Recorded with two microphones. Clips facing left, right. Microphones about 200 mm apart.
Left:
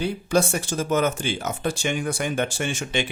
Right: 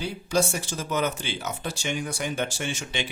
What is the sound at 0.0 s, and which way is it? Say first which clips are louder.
Speech: left 4 dB; 55° left (ahead or behind).